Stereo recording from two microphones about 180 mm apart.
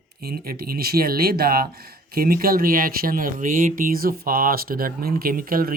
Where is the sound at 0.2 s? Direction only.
60° right (ahead or behind).